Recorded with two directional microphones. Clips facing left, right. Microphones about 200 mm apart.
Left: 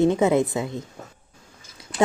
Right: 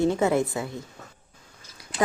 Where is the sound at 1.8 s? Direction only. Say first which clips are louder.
Left 4 dB; 25° left (ahead or behind).